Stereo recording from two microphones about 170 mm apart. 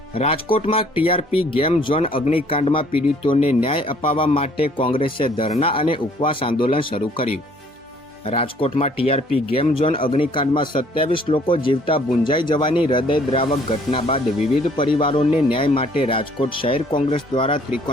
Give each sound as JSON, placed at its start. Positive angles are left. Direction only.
{"t": 0.1, "sound": "speech", "side_deg": 35}